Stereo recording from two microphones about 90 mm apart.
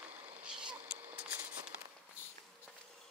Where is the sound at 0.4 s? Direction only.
10° right (ahead or behind).